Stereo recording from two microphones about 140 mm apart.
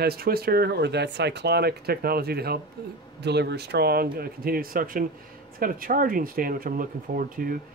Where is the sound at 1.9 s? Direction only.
90° right.